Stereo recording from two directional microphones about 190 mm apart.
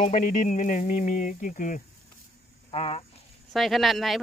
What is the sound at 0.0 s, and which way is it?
Speech, 45° left (ahead or behind).